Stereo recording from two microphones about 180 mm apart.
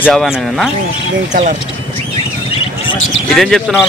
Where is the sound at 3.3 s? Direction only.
Centre (ahead or behind).